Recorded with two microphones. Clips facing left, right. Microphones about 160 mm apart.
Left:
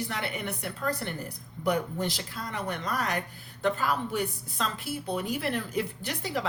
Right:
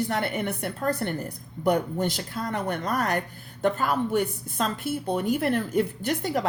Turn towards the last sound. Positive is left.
turn(degrees=-50)  # may be behind; listen again after turning